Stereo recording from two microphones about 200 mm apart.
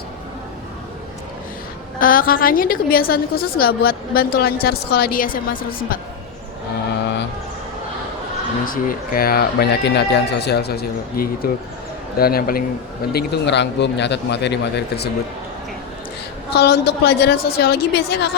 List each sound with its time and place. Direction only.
2.0 s a woman's voice: 45° left (ahead or behind)
8.6 s a woman's voice: 45° left (ahead or behind)
16.5 s a woman's voice: 55° left (ahead or behind)